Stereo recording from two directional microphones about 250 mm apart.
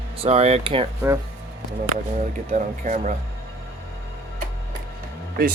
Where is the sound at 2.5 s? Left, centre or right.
Right.